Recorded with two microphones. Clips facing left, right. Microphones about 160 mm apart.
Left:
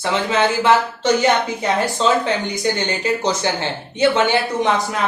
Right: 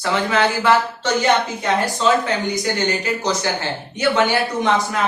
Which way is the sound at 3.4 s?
20° left (ahead or behind).